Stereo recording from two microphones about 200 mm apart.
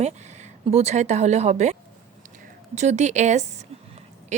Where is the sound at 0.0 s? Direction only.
35° right (ahead or behind).